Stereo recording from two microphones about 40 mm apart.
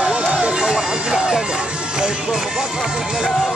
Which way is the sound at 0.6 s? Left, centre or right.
Centre.